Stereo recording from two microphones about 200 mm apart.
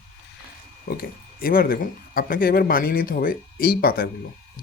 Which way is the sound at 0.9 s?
50° left (ahead or behind).